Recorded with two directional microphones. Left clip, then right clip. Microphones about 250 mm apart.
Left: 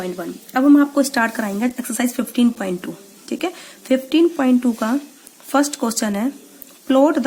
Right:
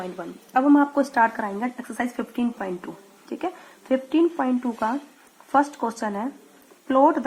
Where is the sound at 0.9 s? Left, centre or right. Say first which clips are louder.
Left 2 dB; left.